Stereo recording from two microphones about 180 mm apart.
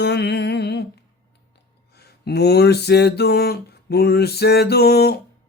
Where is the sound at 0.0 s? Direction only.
65° left (ahead or behind).